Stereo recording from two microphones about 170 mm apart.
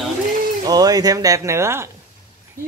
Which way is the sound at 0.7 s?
20° right (ahead or behind).